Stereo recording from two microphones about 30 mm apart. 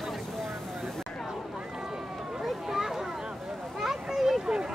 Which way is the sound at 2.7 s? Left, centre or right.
Centre.